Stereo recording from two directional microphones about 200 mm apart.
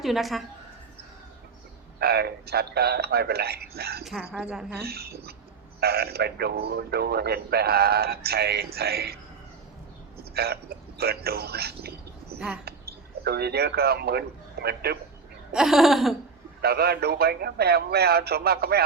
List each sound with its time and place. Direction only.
0.0 s speech: centre (ahead or behind)
2.0 s a man's voice: 50° right (ahead or behind)
4.0 s speech: 5° right (ahead or behind)
4.8 s a man's voice: 50° right (ahead or behind)
10.2 s speech: 50° right (ahead or behind)
15.5 s speech: centre (ahead or behind)
16.6 s a man's voice: 50° right (ahead or behind)